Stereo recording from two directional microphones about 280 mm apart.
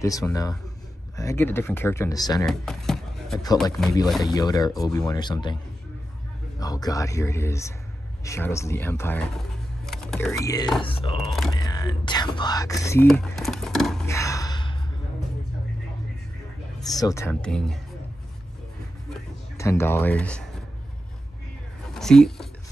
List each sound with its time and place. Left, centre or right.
0.0 s speech: centre
2.4 s a sound: centre
4.3 s speech: centre
6.6 s speech: centre
9.8 s a sound: centre
10.3 s speech: centre
11.2 s speech: centre
11.5 s whispering: centre
16.9 s speech: centre
19.5 s speech: centre
21.9 s speech: centre